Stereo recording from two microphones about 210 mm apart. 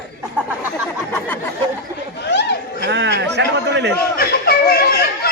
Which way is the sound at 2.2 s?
55° left (ahead or behind).